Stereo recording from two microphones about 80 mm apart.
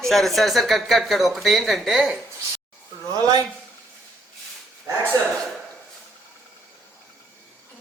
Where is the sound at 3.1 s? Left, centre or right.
Right.